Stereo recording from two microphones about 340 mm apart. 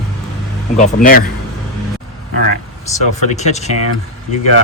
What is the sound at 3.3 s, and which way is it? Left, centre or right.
Speech, centre.